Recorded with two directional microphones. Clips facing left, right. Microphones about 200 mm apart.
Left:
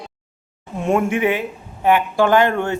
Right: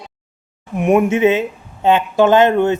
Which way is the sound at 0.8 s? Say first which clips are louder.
Right 5 dB; 20° right (ahead or behind).